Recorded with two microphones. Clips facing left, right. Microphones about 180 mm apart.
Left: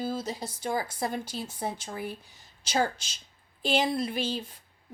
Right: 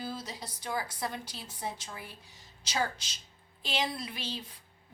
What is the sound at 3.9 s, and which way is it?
Speech, 50° left (ahead or behind).